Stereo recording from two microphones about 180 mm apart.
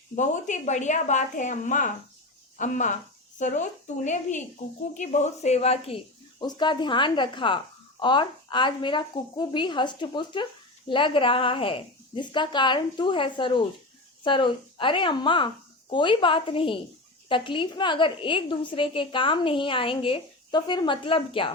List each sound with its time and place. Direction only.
0.2 s a woman's voice: 40° left (ahead or behind)
6.4 s a woman's voice: 25° left (ahead or behind)